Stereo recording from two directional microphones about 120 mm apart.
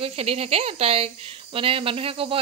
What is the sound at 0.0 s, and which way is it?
Speech, 55° right (ahead or behind).